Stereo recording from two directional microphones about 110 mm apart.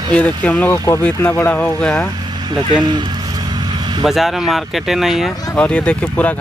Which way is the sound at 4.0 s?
Centre (ahead or behind).